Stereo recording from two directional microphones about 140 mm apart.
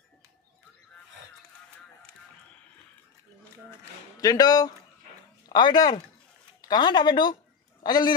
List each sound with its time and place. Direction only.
4.2 s a man's voice: 25° left (ahead or behind)